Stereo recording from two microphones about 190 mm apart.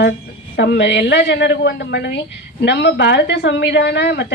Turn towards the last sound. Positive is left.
turn(degrees=65)  # may be behind; listen again after turning